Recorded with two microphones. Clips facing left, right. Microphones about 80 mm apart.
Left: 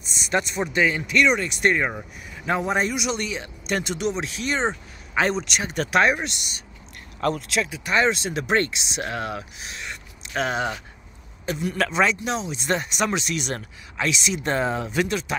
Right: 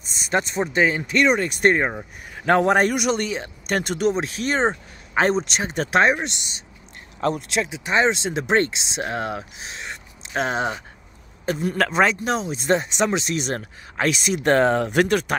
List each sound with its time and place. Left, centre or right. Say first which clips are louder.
0.0 s a man's voice: right 1 dB; right
2.3 s a man's voice: right 6 dB; right
12.6 s speech: right 4 dB; right